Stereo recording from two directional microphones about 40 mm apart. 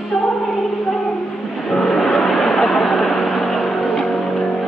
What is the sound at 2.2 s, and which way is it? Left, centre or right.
Chatter, left.